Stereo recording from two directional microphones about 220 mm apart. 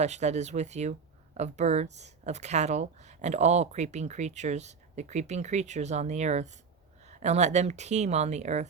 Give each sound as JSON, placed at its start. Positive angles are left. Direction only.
{"t": 0.0, "sound": "speech", "side_deg": -30}